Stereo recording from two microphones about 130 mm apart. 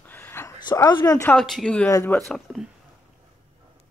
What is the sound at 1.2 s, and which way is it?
Speech, 5° left (ahead or behind).